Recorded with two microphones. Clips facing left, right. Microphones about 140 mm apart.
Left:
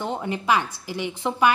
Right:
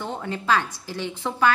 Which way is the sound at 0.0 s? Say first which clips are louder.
Left 3 dB; 15° left (ahead or behind).